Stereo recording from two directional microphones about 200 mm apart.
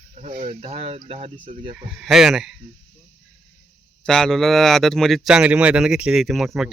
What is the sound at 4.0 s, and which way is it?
Speech, 5° left (ahead or behind).